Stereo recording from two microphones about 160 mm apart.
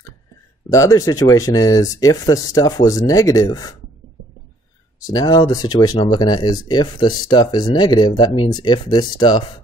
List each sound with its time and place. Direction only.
0.7 s speech: 20° left (ahead or behind)
5.0 s speech: 25° left (ahead or behind)